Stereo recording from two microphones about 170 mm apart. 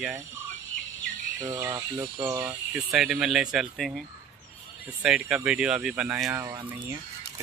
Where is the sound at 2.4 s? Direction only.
5° right (ahead or behind).